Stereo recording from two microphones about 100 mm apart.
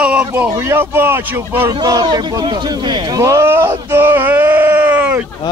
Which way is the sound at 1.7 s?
40° right (ahead or behind).